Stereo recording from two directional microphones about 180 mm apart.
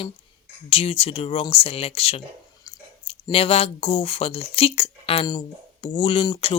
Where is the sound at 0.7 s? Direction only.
35° left (ahead or behind).